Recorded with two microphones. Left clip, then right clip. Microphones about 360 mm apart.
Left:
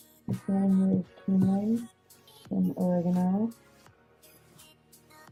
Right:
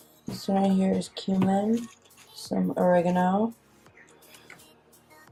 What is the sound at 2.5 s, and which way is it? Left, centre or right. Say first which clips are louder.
Speech: right 8 dB; centre.